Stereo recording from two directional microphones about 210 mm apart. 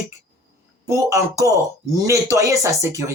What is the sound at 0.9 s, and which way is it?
A woman's voice, 15° right (ahead or behind).